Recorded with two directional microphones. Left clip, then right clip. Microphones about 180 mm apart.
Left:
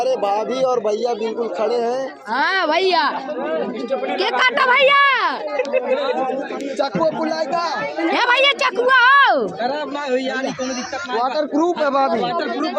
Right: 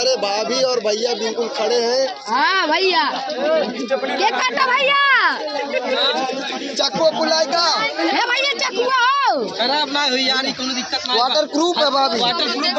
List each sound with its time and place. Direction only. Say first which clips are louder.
0.0 s speech: even; 25° left (ahead or behind)
2.3 s speech: even; centre (ahead or behind)
7.2 s speech: right 3 dB; 30° left (ahead or behind)
7.7 s speech: right 2 dB; 5° left (ahead or behind)
11.2 s speech: even; 35° left (ahead or behind)
11.9 s speech: even; 20° left (ahead or behind)